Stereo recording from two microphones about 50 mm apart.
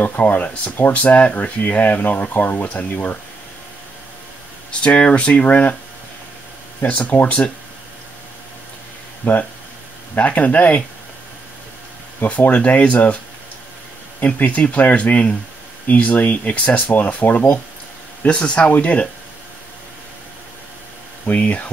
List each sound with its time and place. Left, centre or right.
0.0 s speech: left
0.9 s speech: left
4.6 s speech: left
7.1 s speech: left
9.2 s speech: left
12.2 s speech: left
14.2 s speech: left
18.3 s speech: centre
21.3 s speech: left